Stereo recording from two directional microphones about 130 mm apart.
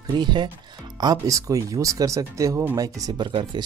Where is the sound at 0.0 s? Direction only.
35° right (ahead or behind).